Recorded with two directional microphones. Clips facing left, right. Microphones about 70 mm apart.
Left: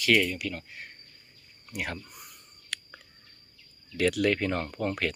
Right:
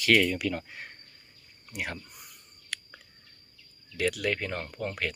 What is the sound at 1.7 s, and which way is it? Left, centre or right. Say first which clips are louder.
Speech: left 1 dB; centre.